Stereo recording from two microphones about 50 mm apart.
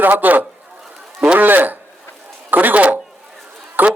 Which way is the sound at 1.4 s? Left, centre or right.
Right.